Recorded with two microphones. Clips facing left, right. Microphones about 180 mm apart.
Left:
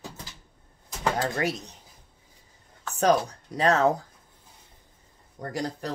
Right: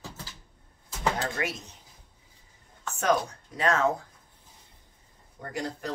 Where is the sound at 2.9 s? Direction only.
35° left (ahead or behind).